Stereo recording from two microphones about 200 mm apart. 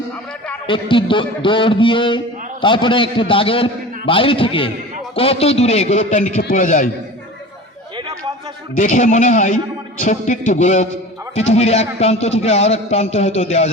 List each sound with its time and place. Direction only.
0.7 s a man's voice: 25° left (ahead or behind)
8.7 s a man's voice: 40° left (ahead or behind)